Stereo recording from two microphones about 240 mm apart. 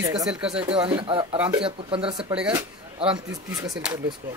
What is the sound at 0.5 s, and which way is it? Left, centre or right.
Speech, right.